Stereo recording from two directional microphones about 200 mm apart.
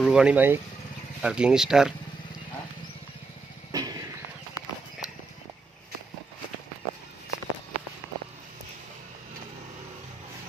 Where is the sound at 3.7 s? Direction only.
20° right (ahead or behind).